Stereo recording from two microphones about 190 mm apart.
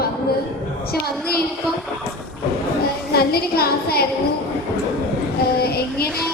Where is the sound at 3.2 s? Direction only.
55° left (ahead or behind).